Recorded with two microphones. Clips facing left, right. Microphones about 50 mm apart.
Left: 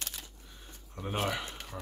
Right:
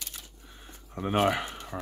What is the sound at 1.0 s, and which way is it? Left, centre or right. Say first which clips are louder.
Speech: right 8 dB; right.